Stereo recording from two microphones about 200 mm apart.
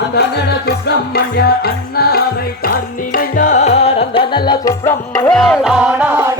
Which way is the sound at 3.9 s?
25° left (ahead or behind).